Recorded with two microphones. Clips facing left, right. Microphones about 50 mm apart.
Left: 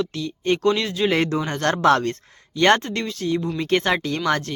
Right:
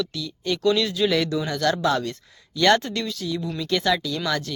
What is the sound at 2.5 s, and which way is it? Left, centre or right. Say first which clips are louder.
Speech: left 2 dB; left.